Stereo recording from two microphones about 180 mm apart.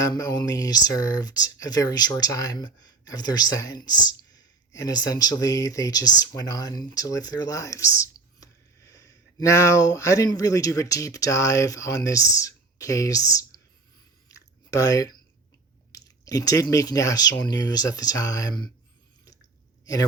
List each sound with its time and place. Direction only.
0.0 s speech: 20° left (ahead or behind)
14.3 s chewing: 15° left (ahead or behind)
15.9 s speech: 20° left (ahead or behind)
19.8 s a sound: 20° left (ahead or behind)